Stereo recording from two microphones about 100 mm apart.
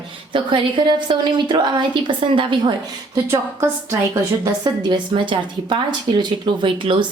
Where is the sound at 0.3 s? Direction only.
55° right (ahead or behind).